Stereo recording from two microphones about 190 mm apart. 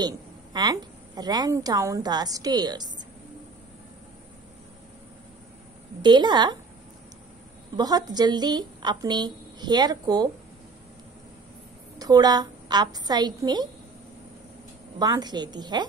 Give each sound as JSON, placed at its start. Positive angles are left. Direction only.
{"t": 0.0, "sound": "a woman's voice", "side_deg": -20}
{"t": 6.0, "sound": "a woman's voice", "side_deg": -25}
{"t": 7.7, "sound": "a woman's voice", "side_deg": -20}
{"t": 12.0, "sound": "a woman's voice", "side_deg": -20}
{"t": 15.0, "sound": "a woman's voice", "side_deg": -20}